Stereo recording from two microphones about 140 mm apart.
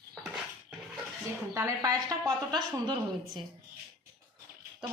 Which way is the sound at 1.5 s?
25° right (ahead or behind).